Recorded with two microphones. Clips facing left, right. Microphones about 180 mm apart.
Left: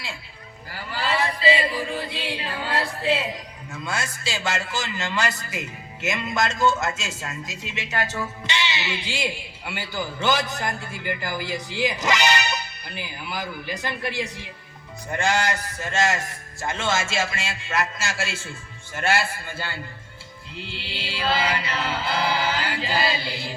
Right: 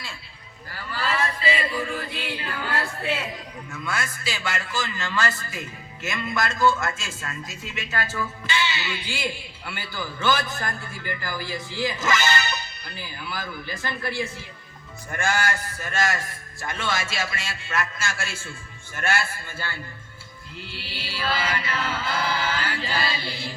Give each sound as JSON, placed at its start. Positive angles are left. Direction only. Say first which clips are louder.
{"t": 0.8, "sound": "chant", "louder": "left 2 dB", "side_deg": 25}
{"t": 3.7, "sound": "a man's voice", "louder": "left 1 dB", "side_deg": 30}